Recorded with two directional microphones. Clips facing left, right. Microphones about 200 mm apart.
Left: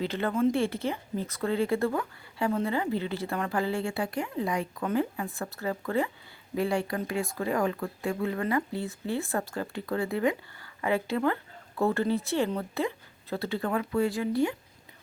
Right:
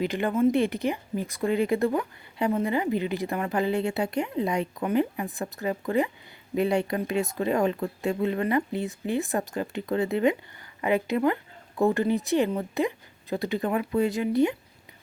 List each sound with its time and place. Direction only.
0.0 s speech: 15° right (ahead or behind)